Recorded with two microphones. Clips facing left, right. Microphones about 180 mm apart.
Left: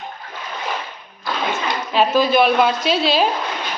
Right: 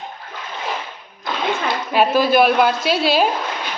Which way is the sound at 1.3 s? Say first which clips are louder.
Even; 20° right (ahead or behind).